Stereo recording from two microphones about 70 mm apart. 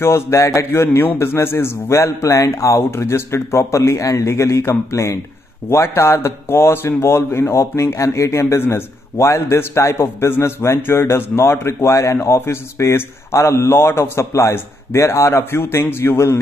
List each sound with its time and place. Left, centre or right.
0.0 s speech: left
0.8 s a man's voice: left